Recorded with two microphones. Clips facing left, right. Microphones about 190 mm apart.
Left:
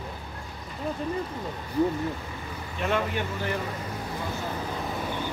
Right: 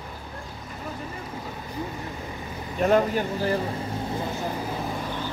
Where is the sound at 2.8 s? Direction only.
40° right (ahead or behind).